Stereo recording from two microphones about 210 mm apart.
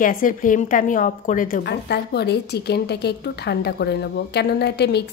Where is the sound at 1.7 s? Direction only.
50° left (ahead or behind).